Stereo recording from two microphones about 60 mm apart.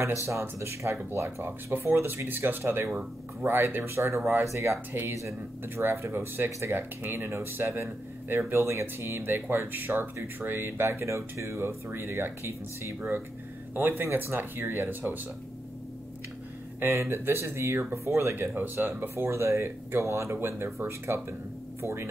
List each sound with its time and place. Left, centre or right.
0.3 s speech: right
5.8 s speech: right
16.8 s speech: right
20.3 s speech: right